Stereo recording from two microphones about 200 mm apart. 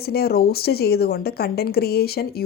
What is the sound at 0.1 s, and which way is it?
A woman's voice, 50° left (ahead or behind).